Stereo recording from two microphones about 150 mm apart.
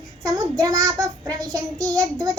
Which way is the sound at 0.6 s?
20° right (ahead or behind).